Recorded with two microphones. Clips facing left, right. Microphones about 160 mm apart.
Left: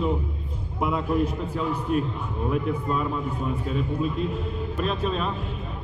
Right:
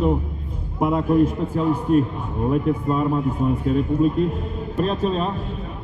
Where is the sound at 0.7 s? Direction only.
40° right (ahead or behind).